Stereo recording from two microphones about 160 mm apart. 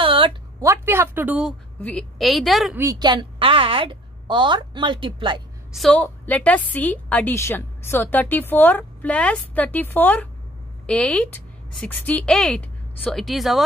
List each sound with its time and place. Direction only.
0.0 s a sound: 35° right (ahead or behind)
0.6 s speech: 15° right (ahead or behind)
1.8 s a woman's voice: 10° left (ahead or behind)
2.8 s a woman's voice: 25° right (ahead or behind)
5.7 s a woman's voice: centre (ahead or behind)
5.9 s a woman's voice: 10° left (ahead or behind)